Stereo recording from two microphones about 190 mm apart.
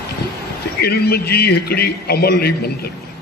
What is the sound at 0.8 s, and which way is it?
A man's voice, 55° left (ahead or behind).